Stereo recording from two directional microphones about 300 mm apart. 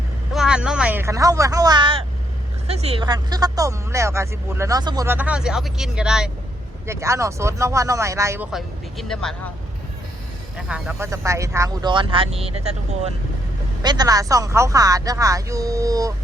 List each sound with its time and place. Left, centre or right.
0.3 s speech: centre
10.7 s speech: centre